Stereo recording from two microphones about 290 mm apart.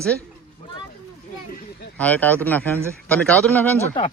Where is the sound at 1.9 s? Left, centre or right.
Centre.